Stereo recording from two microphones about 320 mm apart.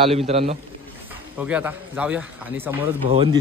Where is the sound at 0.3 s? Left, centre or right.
Centre.